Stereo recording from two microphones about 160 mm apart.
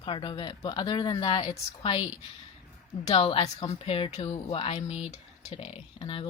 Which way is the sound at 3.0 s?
40° left (ahead or behind).